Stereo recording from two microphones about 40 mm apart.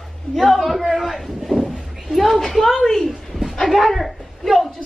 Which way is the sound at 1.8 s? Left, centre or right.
Centre.